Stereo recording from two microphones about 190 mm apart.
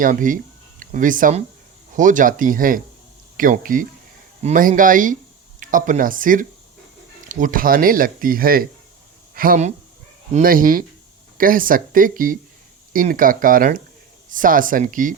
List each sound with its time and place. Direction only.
0.0 s speech: 45° right (ahead or behind)